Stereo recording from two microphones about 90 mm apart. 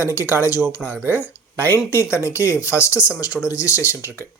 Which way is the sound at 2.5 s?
15° right (ahead or behind).